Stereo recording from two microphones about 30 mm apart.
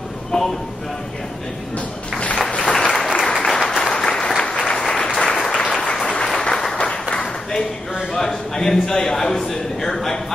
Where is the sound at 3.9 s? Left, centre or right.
Left.